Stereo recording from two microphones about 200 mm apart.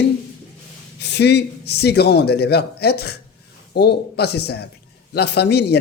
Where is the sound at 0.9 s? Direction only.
60° left (ahead or behind).